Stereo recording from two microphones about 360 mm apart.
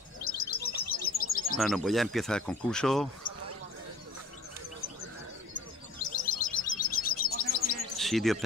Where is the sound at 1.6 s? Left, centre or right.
Centre.